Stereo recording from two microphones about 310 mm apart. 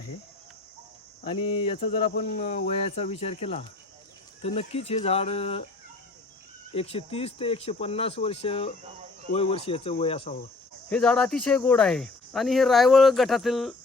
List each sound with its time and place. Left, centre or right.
1.2 s speech: centre
6.7 s speech: centre
10.8 s speech: centre